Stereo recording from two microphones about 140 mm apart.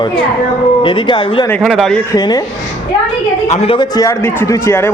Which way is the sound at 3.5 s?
50° left (ahead or behind).